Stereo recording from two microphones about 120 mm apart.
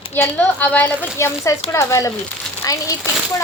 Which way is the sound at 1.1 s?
25° left (ahead or behind).